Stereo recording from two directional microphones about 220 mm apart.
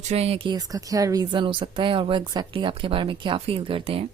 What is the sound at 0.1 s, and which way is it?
Speech, 30° right (ahead or behind).